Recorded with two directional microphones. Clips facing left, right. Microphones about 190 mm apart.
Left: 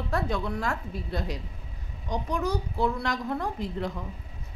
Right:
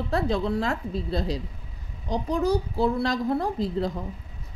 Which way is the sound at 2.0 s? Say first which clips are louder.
Right 5 dB; 35° right (ahead or behind).